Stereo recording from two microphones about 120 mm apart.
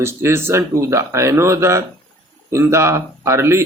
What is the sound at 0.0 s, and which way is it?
Speech, 20° right (ahead or behind).